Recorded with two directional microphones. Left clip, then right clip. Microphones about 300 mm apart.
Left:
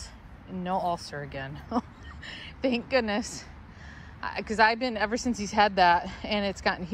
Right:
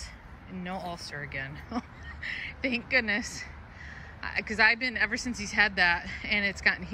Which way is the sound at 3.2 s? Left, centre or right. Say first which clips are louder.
Right 1 dB; left.